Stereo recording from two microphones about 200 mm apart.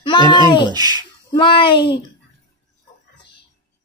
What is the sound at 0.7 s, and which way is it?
Speech, 20° right (ahead or behind).